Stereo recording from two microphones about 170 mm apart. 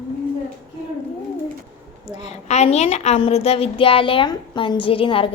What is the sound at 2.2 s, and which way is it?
A woman's voice, 40° left (ahead or behind).